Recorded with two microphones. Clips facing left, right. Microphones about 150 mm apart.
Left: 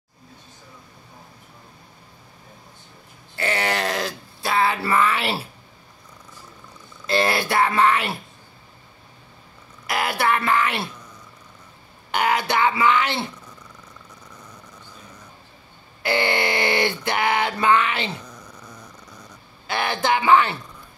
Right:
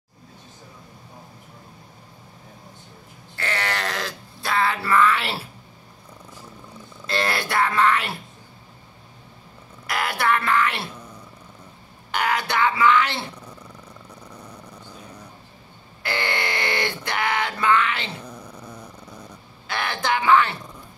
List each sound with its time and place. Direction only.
3.3 s grunt: 10° left (ahead or behind)
7.1 s speech: 10° left (ahead or behind)
9.9 s speech: 10° left (ahead or behind)
12.2 s speech: 20° left (ahead or behind)
16.1 s a sound: 25° left (ahead or behind)
16.4 s a sound: 10° left (ahead or behind)
17.4 s a sound: 20° left (ahead or behind)
18.2 s dog: 30° right (ahead or behind)
19.9 s speech: 20° left (ahead or behind)